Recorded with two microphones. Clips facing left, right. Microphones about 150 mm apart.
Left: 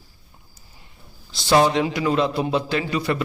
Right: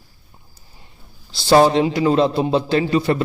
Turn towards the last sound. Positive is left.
turn(degrees=-30)  # may be behind; listen again after turning